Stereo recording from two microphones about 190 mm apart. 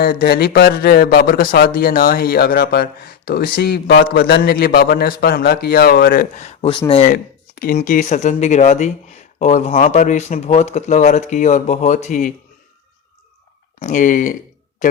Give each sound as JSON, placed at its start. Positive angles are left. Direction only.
{"t": 0.0, "sound": "a man's voice", "side_deg": 50}
{"t": 7.1, "sound": "a sound", "side_deg": 50}
{"t": 7.8, "sound": "speech", "side_deg": 40}
{"t": 13.7, "sound": "a man's voice", "side_deg": 40}